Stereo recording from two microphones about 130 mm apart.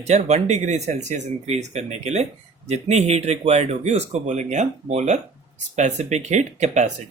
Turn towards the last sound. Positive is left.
turn(degrees=-65)  # may be behind; listen again after turning